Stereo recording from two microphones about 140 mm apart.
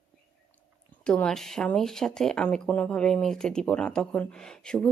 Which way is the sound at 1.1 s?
5° left (ahead or behind).